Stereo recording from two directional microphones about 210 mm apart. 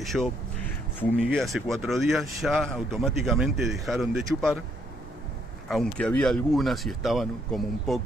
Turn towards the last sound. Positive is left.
turn(degrees=0)  # may be behind; listen again after turning